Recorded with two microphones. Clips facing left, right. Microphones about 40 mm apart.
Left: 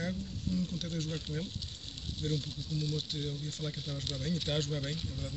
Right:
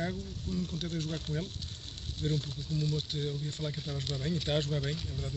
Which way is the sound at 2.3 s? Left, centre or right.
Right.